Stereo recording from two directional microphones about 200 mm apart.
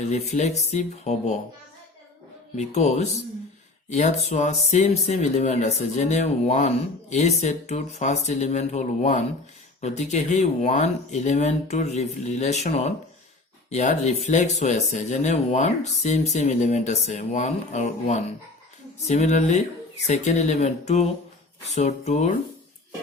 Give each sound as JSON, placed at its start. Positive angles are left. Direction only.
{"t": 0.0, "sound": "speech", "side_deg": 35}
{"t": 2.6, "sound": "speech", "side_deg": 35}